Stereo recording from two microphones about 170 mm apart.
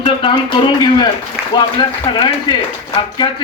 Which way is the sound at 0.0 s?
30° left (ahead or behind).